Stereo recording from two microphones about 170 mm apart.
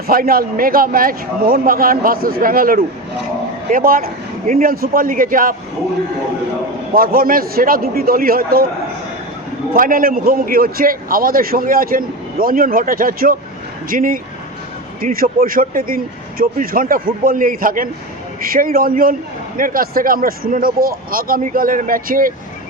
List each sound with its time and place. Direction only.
0.1 s a man's voice: 60° right (ahead or behind)
6.9 s a man's voice: 60° right (ahead or behind)
9.7 s a man's voice: 55° right (ahead or behind)